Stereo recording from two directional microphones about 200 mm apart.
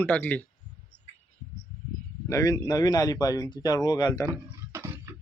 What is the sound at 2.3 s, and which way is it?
A man's voice, 15° left (ahead or behind).